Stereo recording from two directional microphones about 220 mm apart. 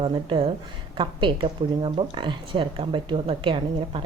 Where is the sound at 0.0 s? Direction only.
25° right (ahead or behind).